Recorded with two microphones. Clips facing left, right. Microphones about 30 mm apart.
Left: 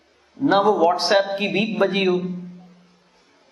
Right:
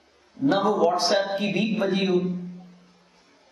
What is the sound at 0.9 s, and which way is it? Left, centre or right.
A man's voice, left.